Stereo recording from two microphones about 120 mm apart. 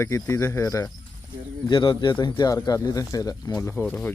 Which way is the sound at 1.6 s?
45° left (ahead or behind).